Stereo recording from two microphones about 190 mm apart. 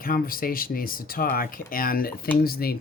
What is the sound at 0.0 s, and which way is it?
Speech, 50° left (ahead or behind).